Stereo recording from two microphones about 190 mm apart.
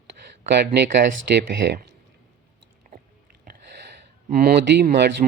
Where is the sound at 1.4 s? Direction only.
60° right (ahead or behind).